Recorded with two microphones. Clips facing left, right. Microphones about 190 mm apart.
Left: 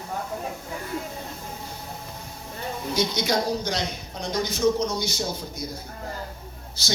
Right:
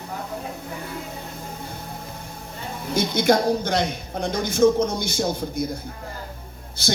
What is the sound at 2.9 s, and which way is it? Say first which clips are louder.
A woman's voice: right 6 dB; 55° right (ahead or behind).